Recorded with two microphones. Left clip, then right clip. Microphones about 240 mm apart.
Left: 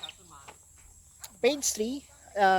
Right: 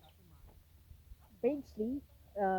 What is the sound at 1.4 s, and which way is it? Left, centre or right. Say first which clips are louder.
Speech: left 8 dB; centre.